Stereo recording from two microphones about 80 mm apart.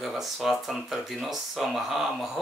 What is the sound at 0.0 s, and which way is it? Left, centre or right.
Speech, centre.